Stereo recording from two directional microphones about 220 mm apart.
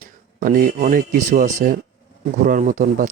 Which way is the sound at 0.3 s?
35° right (ahead or behind).